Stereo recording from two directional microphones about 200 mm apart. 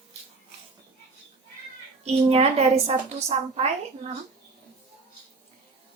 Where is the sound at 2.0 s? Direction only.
30° right (ahead or behind).